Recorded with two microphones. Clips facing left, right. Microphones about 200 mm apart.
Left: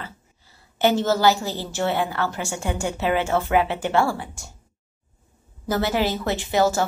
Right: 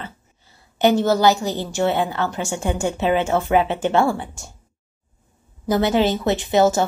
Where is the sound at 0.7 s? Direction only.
15° right (ahead or behind).